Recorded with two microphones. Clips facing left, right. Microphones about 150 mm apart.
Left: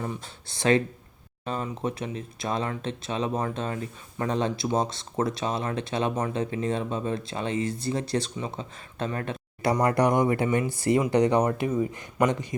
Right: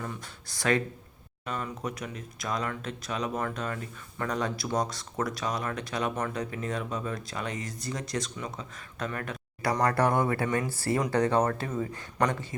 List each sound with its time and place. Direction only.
0.0 s speech: 25° left (ahead or behind)
9.8 s speech: 15° left (ahead or behind)